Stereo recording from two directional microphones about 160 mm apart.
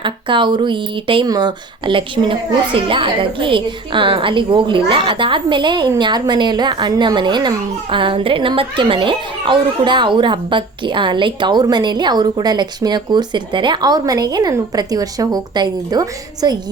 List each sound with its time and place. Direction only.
0.0 s speech: 30° right (ahead or behind)